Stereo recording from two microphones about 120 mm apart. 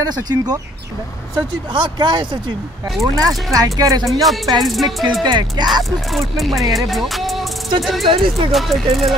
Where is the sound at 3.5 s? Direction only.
30° right (ahead or behind).